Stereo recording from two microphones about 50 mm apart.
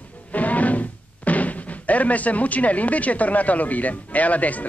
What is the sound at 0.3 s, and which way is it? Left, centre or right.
Speech, left.